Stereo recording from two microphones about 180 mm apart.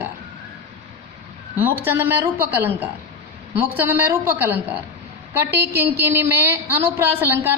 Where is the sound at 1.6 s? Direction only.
10° right (ahead or behind).